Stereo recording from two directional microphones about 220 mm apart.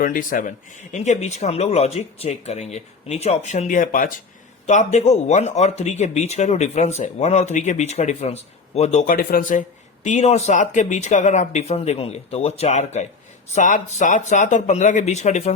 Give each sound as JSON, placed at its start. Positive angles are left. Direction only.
{"t": 0.0, "sound": "speech", "side_deg": 40}